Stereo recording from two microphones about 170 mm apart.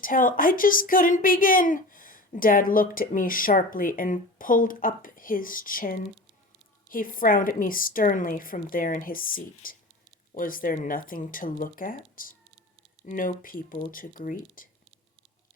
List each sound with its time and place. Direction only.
0.0 s a woman's voice: 55° left (ahead or behind)